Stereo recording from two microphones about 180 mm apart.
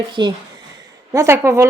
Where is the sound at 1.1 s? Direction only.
15° right (ahead or behind).